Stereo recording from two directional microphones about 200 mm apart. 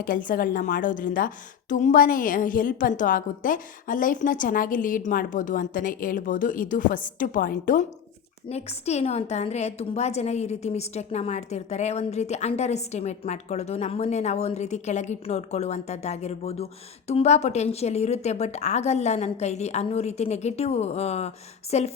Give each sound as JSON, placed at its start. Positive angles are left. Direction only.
{"t": 0.0, "sound": "a woman's voice", "side_deg": 45}